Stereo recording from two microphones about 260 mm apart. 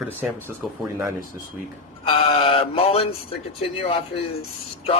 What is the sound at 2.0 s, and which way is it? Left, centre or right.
Speech, left.